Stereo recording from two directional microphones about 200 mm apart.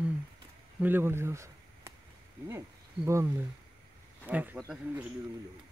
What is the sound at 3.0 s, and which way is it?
Speech, 15° right (ahead or behind).